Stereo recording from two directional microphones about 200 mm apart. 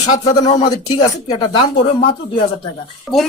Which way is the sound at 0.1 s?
35° left (ahead or behind).